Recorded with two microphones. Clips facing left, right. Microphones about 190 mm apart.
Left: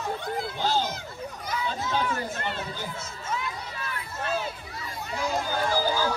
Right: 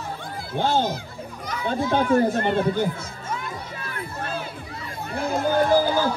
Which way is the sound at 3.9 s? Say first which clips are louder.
Even; 55° right (ahead or behind).